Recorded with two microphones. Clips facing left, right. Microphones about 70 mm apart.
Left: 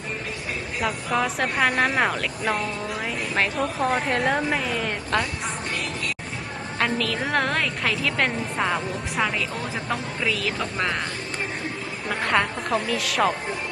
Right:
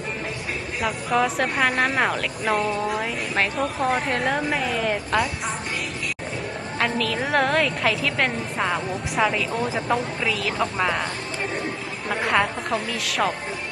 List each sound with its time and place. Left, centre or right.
0.8 s speech: centre
6.7 s speech: centre
12.0 s speech: centre